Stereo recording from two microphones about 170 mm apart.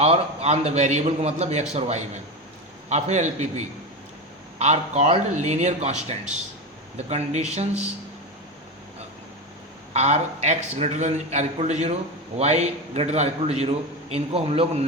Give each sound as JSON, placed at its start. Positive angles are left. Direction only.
{"t": 0.0, "sound": "a man's voice", "side_deg": -35}
{"t": 9.9, "sound": "a man's voice", "side_deg": -40}